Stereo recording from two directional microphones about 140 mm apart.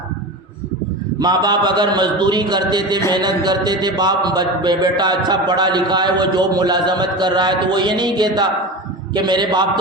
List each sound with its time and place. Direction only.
1.2 s a man's voice: 30° right (ahead or behind)